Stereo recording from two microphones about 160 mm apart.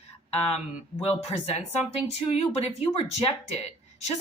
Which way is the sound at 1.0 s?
40° left (ahead or behind).